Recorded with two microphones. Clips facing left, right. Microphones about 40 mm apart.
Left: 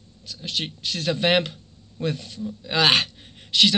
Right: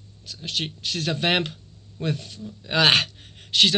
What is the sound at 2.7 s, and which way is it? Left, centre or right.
Speech, centre.